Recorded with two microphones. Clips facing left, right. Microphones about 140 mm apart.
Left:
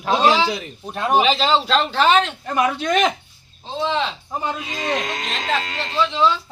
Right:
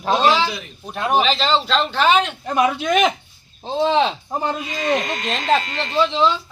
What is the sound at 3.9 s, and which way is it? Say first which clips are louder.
Speech: right 5 dB; 60° right (ahead or behind).